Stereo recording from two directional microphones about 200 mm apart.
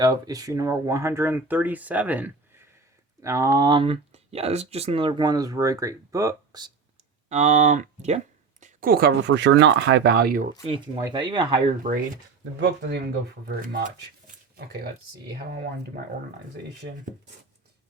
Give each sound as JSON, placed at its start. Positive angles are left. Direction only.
{"t": 0.0, "sound": "speech", "side_deg": -20}
{"t": 7.3, "sound": "speech", "side_deg": -35}
{"t": 8.6, "sound": "speech", "side_deg": -45}
{"t": 10.7, "sound": "speech", "side_deg": -25}
{"t": 11.9, "sound": "speech", "side_deg": -40}
{"t": 13.5, "sound": "a sound", "side_deg": -50}